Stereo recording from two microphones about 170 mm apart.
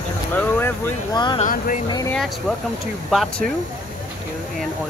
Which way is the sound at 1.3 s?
55° left (ahead or behind).